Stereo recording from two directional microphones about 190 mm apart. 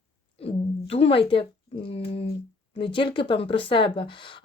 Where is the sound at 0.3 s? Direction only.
30° left (ahead or behind).